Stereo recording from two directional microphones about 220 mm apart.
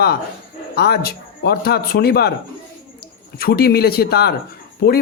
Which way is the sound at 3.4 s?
45° left (ahead or behind).